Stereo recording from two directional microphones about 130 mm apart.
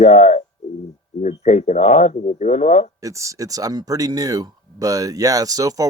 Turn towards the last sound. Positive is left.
turn(degrees=-30)  # may be behind; listen again after turning